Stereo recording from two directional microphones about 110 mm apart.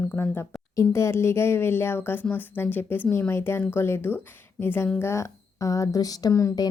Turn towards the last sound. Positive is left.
turn(degrees=30)  # may be behind; listen again after turning